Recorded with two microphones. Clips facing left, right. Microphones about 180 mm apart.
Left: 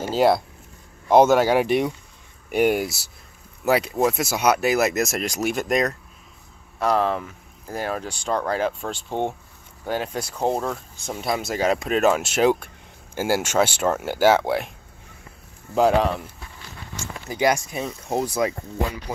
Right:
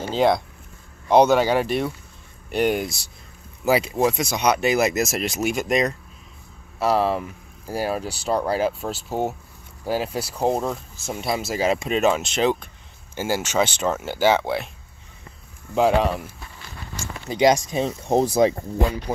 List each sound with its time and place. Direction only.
0.0 s speech: 5° left (ahead or behind)
15.7 s speech: centre (ahead or behind)
17.3 s speech: 20° right (ahead or behind)